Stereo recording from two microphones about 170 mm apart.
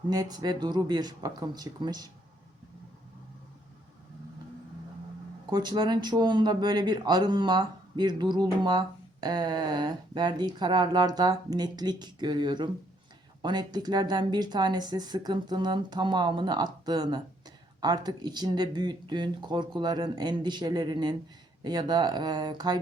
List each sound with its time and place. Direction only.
0.1 s speech: 25° right (ahead or behind)
5.5 s speech: 25° right (ahead or behind)